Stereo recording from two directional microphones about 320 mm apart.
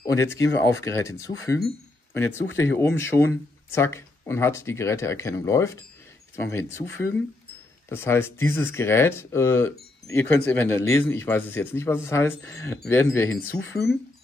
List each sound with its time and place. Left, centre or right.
0.0 s speech: centre